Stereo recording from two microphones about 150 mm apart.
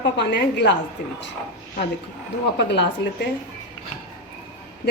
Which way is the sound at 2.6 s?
90° left.